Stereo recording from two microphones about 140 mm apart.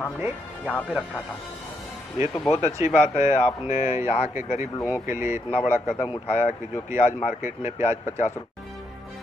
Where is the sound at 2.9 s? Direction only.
55° left (ahead or behind).